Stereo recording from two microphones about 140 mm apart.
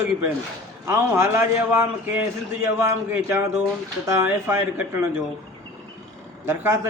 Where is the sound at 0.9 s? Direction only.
15° right (ahead or behind).